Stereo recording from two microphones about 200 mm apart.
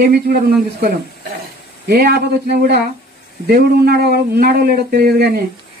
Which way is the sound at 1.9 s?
50° right (ahead or behind).